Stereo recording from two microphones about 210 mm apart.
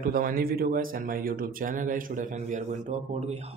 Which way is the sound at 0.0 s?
40° right (ahead or behind).